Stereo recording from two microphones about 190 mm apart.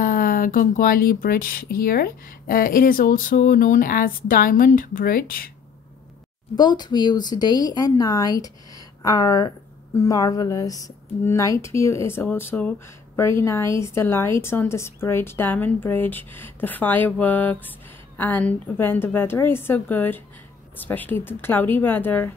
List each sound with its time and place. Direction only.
0.0 s speech: 50° left (ahead or behind)
6.5 s speech: 20° left (ahead or behind)